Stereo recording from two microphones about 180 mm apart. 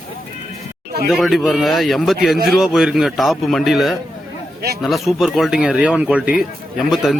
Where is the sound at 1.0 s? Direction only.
Centre (ahead or behind).